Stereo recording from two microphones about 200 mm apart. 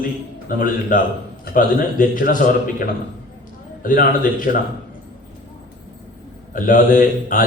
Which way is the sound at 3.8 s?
40° left (ahead or behind).